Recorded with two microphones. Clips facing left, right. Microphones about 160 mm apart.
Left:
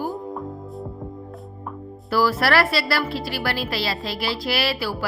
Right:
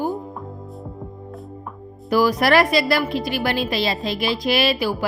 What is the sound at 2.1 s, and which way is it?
A woman's voice, 15° right (ahead or behind).